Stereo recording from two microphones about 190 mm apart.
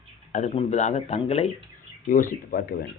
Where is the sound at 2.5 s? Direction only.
45° left (ahead or behind).